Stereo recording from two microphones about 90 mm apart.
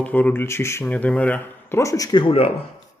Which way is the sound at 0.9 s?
15° left (ahead or behind).